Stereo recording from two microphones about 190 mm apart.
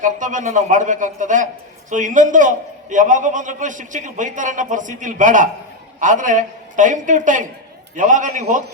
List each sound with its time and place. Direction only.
0.0 s a man's voice: 40° right (ahead or behind)